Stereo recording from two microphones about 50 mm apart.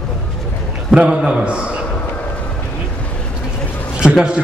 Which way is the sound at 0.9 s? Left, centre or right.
Centre.